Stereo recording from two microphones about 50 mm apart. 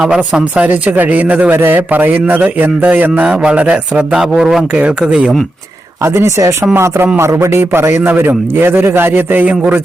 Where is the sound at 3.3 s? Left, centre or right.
Right.